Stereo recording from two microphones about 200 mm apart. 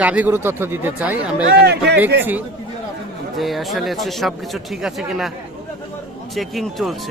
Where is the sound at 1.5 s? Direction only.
55° right (ahead or behind).